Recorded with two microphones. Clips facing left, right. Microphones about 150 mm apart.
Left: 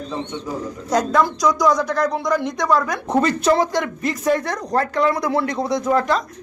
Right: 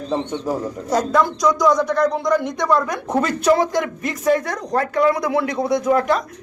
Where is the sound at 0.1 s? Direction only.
35° right (ahead or behind).